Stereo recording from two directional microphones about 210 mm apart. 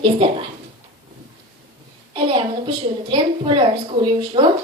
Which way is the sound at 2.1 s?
25° right (ahead or behind).